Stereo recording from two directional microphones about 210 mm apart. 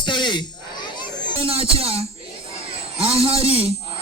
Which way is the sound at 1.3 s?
25° right (ahead or behind).